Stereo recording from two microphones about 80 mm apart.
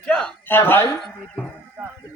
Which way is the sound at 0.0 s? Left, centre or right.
Centre.